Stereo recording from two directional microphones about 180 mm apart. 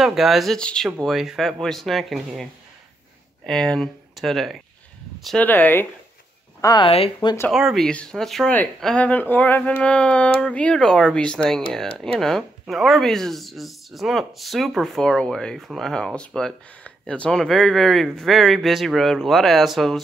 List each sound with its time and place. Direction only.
0.0 s speech: centre (ahead or behind)
3.4 s speech: 5° left (ahead or behind)
6.6 s speech: 25° left (ahead or behind)
7.5 s speech: centre (ahead or behind)